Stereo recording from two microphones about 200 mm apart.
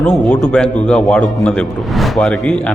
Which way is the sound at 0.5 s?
5° left (ahead or behind).